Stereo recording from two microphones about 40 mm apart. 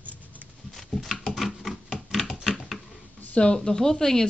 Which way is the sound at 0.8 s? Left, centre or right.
Centre.